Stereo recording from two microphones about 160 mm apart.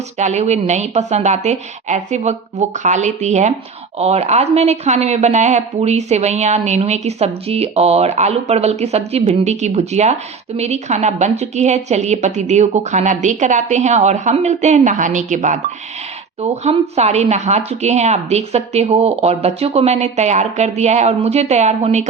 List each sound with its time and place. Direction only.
0.2 s a woman's voice: 45° right (ahead or behind)